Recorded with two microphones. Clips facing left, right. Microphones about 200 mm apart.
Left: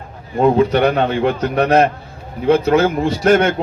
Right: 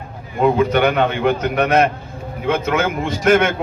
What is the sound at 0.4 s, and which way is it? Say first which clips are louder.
A man's voice: left 2 dB; 35° left (ahead or behind).